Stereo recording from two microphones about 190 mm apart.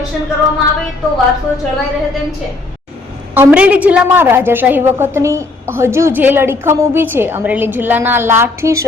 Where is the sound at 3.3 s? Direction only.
10° right (ahead or behind).